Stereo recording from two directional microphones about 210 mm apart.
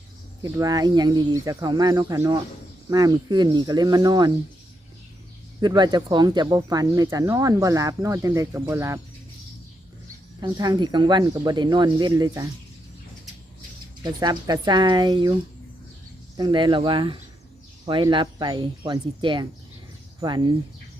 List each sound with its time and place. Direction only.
0.4 s speech: 15° right (ahead or behind)
5.5 s speech: 20° right (ahead or behind)
10.4 s speech: 20° right (ahead or behind)
14.0 s speech: 20° right (ahead or behind)
16.4 s speech: 20° right (ahead or behind)